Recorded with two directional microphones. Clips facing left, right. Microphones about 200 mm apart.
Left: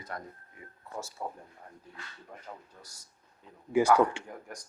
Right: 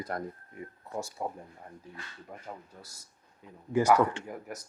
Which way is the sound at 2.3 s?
10° right (ahead or behind).